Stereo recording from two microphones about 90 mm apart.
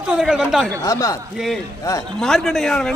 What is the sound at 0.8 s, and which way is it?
Speech, 40° left (ahead or behind).